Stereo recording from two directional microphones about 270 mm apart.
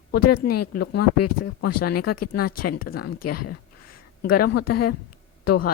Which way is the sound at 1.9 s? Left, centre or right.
Left.